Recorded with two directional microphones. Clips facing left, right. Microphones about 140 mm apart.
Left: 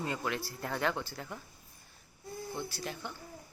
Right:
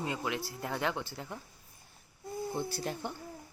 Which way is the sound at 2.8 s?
40° right (ahead or behind).